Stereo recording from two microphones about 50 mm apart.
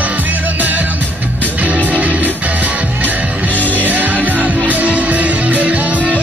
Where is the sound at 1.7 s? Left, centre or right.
Right.